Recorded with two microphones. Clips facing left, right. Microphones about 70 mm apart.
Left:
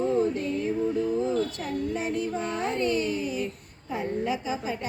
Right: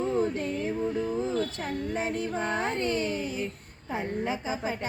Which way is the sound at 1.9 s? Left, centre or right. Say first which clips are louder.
Even; right.